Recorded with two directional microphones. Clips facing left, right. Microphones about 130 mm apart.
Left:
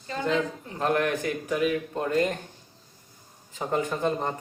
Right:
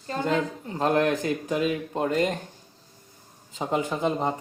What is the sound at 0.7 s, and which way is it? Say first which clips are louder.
Speech: right 3 dB; 25° right (ahead or behind).